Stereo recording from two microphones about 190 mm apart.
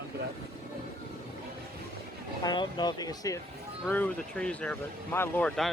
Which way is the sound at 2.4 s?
25° left (ahead or behind).